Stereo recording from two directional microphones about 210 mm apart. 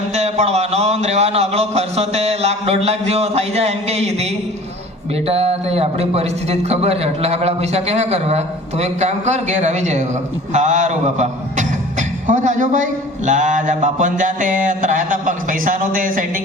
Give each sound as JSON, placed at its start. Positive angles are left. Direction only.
{"t": 0.2, "sound": "a man's voice", "side_deg": -30}
{"t": 5.3, "sound": "a man's voice", "side_deg": -30}